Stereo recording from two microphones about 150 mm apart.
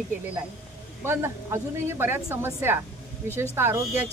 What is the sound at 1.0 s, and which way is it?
Speech, 15° right (ahead or behind).